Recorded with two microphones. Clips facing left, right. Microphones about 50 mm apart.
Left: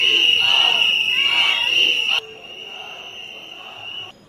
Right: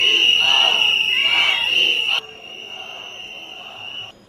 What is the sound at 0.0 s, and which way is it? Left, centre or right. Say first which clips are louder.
Crowd: right 1 dB; centre.